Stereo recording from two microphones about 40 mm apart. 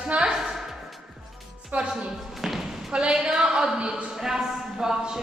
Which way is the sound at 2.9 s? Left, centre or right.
Centre.